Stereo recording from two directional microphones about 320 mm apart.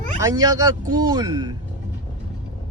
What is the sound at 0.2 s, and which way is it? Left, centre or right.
A man's voice, centre.